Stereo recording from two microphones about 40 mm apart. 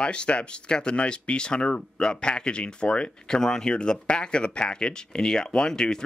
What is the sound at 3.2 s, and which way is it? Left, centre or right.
Speech, centre.